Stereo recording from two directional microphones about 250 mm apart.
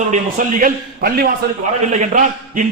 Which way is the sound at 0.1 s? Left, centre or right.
Right.